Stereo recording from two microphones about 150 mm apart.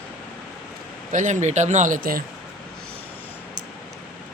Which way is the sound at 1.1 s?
55° right (ahead or behind).